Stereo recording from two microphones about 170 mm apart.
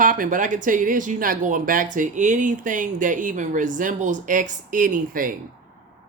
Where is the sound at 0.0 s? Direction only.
50° right (ahead or behind).